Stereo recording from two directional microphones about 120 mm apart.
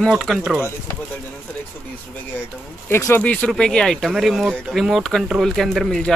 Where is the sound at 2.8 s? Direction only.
20° left (ahead or behind); by 6.1 s 5° left (ahead or behind).